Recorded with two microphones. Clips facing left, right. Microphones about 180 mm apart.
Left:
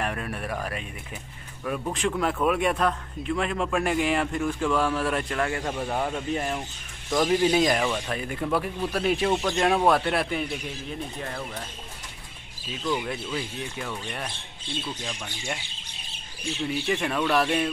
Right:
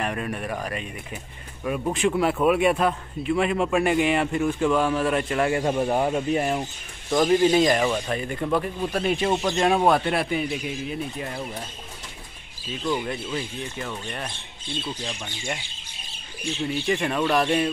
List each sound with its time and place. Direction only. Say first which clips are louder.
0.0 s speech: right 2 dB; centre (ahead or behind)
1.6 s speech: right 4 dB; 10° right (ahead or behind)
4.6 s speech: right 3 dB; 20° right (ahead or behind)
7.2 s speech: right 3 dB; centre (ahead or behind)
9.3 s speech: right 2 dB; 10° right (ahead or behind)
12.8 s speech: right 2 dB; centre (ahead or behind)
16.6 s speech: right 2 dB; 5° left (ahead or behind)